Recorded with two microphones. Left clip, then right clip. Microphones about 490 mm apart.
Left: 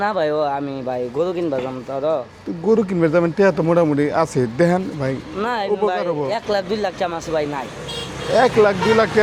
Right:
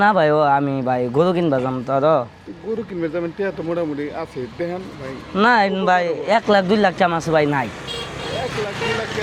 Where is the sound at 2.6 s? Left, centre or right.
Left.